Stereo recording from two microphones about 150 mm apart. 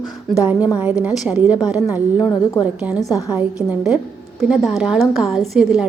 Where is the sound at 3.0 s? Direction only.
25° left (ahead or behind).